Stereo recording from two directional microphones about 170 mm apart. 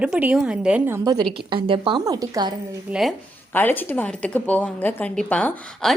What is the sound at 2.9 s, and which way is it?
Speech, centre (ahead or behind).